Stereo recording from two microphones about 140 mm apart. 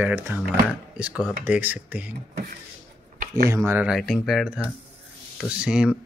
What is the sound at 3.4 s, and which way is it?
Speech, 20° right (ahead or behind).